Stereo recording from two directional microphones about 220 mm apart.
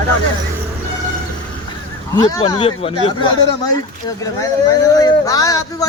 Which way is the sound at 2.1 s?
20° left (ahead or behind).